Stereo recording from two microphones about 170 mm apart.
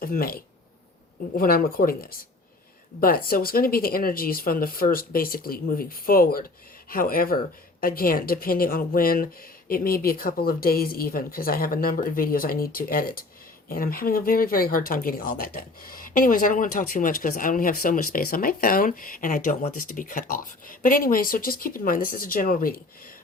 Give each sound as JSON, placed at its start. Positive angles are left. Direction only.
{"t": 0.0, "sound": "speech", "side_deg": 60}